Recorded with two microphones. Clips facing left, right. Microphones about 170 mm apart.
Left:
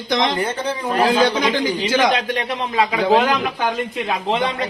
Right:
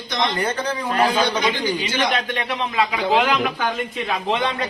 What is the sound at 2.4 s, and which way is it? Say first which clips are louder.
Speech: left 2 dB; 35° left (ahead or behind).